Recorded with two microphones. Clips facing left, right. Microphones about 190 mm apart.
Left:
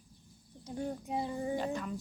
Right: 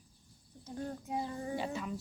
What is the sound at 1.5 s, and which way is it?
Speech, 5° right (ahead or behind).